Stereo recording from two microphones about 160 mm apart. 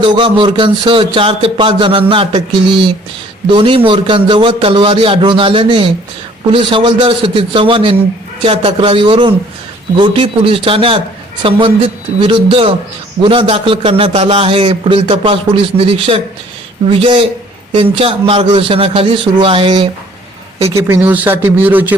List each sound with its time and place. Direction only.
0.0 s a man's voice: 30° right (ahead or behind)
20.7 s speech: 15° right (ahead or behind)